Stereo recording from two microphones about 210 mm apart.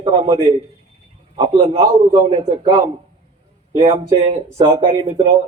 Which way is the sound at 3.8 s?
25° right (ahead or behind).